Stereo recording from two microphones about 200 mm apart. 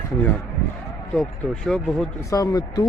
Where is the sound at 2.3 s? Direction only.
20° left (ahead or behind).